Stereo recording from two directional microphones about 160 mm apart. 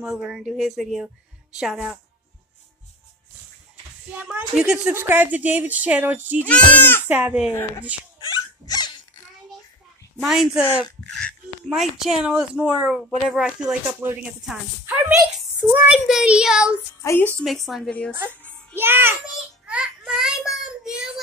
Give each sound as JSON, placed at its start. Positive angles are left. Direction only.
{"t": 0.0, "sound": "speech", "side_deg": -5}
{"t": 4.1, "sound": "speech", "side_deg": -10}
{"t": 6.4, "sound": "speech", "side_deg": 10}
{"t": 7.1, "sound": "speech", "side_deg": -10}
{"t": 8.2, "sound": "dog", "side_deg": 25}
{"t": 10.2, "sound": "speech", "side_deg": 0}
{"t": 17.0, "sound": "a woman's voice", "side_deg": 15}
{"t": 17.4, "sound": "a woman's voice", "side_deg": 0}
{"t": 18.8, "sound": "speech", "side_deg": -15}
{"t": 19.6, "sound": "child singing", "side_deg": -10}